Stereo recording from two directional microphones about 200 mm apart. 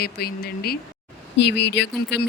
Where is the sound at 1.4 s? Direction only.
60° left (ahead or behind).